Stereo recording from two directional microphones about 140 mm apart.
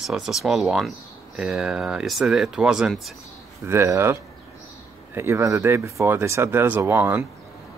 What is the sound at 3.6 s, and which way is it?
Speech, 20° right (ahead or behind).